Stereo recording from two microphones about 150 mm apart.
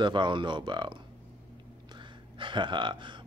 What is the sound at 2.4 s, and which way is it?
Speech, 30° right (ahead or behind).